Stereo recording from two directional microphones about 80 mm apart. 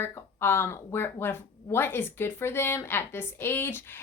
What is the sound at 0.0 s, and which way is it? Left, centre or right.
Speech, left.